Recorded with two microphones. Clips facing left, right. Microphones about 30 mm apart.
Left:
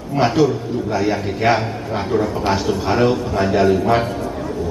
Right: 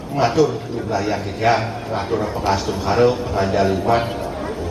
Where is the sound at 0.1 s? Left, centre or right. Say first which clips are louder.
Left 1 dB; centre.